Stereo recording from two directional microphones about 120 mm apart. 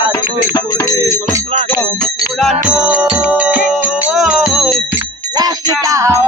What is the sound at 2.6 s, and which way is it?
Music, 10° right (ahead or behind).